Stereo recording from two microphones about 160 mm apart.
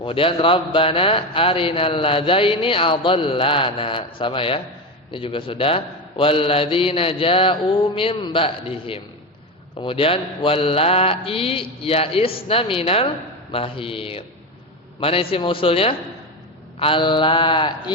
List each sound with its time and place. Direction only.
0.0 s a man's voice: 35° left (ahead or behind)